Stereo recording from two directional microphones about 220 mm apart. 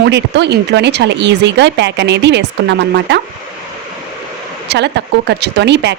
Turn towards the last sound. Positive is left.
turn(degrees=-50)  # may be behind; listen again after turning